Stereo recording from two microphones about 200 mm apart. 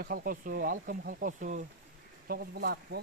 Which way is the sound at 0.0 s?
45° right (ahead or behind).